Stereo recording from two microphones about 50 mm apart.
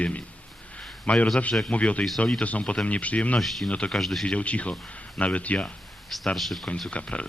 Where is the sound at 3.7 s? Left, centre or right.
Left.